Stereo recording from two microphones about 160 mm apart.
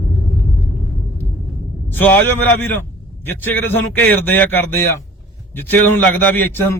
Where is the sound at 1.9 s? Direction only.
10° left (ahead or behind).